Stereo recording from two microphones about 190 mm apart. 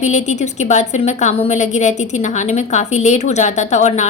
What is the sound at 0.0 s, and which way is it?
A woman's voice, 40° left (ahead or behind).